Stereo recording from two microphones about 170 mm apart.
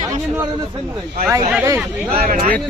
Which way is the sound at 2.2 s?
55° right (ahead or behind).